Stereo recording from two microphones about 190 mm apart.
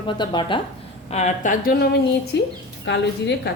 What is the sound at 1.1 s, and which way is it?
Speech, 35° left (ahead or behind).